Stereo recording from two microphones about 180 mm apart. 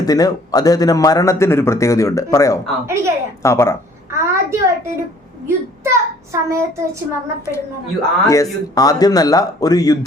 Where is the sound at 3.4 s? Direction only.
15° left (ahead or behind).